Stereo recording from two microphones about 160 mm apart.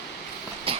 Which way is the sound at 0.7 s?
35° right (ahead or behind).